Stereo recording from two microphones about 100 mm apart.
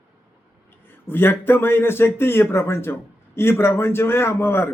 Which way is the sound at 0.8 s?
20° left (ahead or behind).